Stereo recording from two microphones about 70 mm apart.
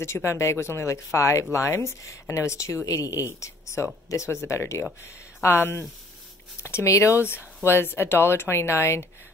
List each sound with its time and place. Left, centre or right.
0.0 s speech: left
7.6 s speech: left